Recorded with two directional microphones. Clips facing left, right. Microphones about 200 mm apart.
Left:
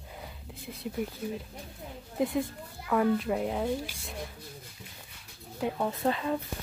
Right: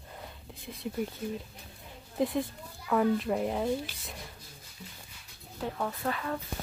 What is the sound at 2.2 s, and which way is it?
Speech, centre (ahead or behind).